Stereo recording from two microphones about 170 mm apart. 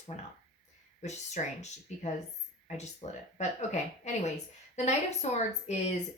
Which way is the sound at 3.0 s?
35° left (ahead or behind).